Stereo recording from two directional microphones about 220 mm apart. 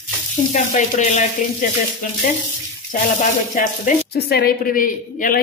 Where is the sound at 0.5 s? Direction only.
35° left (ahead or behind).